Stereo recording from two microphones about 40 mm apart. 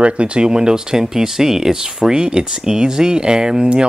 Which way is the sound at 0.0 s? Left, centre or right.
Right.